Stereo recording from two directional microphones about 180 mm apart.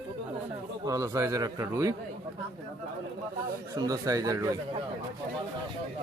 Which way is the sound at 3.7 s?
20° right (ahead or behind).